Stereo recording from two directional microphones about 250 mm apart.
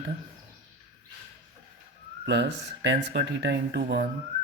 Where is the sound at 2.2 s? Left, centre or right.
Right.